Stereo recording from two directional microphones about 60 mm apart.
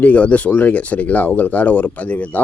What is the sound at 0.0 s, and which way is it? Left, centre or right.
Speech, left.